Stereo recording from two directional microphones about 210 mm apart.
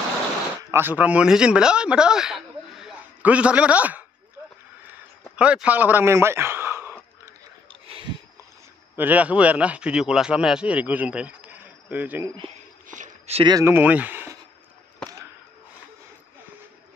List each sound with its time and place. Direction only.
0.6 s speech: 15° right (ahead or behind)
5.3 s speech: 5° right (ahead or behind)
7.8 s a sound: 25° right (ahead or behind)
8.9 s speech: 10° right (ahead or behind)
12.8 s a sound: 35° right (ahead or behind)
13.4 s speech: 20° right (ahead or behind)